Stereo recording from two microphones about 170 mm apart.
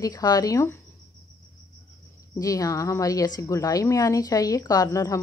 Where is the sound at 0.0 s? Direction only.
20° left (ahead or behind).